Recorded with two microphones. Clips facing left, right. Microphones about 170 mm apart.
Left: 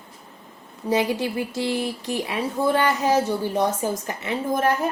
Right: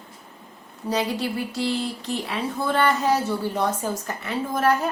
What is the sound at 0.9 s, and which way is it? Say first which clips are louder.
A woman's voice: left 3 dB; 20° left (ahead or behind).